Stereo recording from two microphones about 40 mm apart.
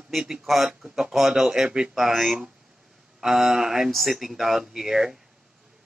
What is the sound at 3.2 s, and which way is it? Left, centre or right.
Speech, centre.